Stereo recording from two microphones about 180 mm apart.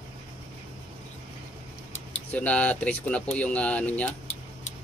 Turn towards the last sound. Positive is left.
turn(degrees=10)  # may be behind; listen again after turning